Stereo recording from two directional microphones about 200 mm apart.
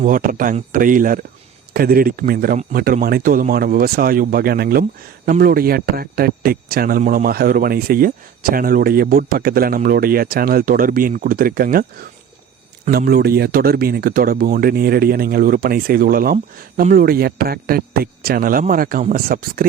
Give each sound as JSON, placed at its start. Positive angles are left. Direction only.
{"t": 0.0, "sound": "speech", "side_deg": -45}
{"t": 12.9, "sound": "speech", "side_deg": -50}